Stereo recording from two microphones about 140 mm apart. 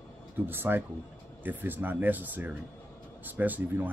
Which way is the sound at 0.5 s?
15° right (ahead or behind).